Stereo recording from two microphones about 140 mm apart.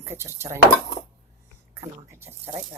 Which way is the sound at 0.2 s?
20° right (ahead or behind).